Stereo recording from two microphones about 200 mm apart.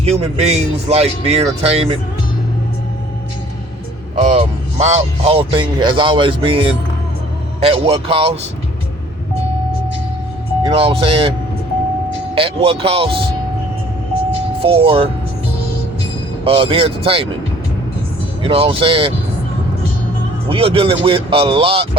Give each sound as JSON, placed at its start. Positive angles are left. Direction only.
{"t": 0.0, "sound": "speech", "side_deg": -30}
{"t": 4.2, "sound": "a man's voice", "side_deg": -30}
{"t": 10.7, "sound": "a man's voice", "side_deg": -30}
{"t": 12.3, "sound": "a man's voice", "side_deg": -30}
{"t": 14.6, "sound": "a man's voice", "side_deg": -30}
{"t": 16.4, "sound": "a man's voice", "side_deg": -25}
{"t": 18.4, "sound": "a man's voice", "side_deg": -25}
{"t": 20.5, "sound": "a man's voice", "side_deg": -25}